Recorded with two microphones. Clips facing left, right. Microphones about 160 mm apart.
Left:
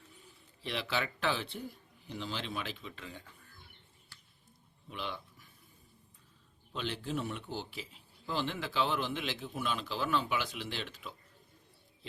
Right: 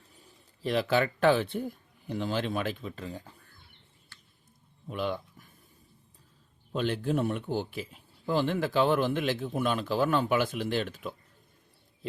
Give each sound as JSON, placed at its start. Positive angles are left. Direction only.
{"t": 0.2, "sound": "speech", "side_deg": -45}
{"t": 4.9, "sound": "a sound", "side_deg": -50}
{"t": 6.7, "sound": "speech", "side_deg": -50}